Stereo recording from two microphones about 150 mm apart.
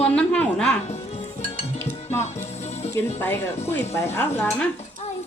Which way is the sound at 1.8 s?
15° left (ahead or behind).